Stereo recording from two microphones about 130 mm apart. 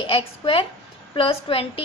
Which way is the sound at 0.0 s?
45° left (ahead or behind).